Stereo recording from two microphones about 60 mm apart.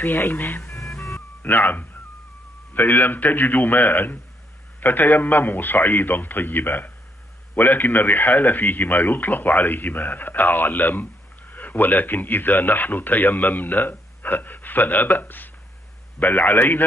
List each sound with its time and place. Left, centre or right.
0.0 s a man's voice: left
0.7 s music: left
1.4 s a man's voice: left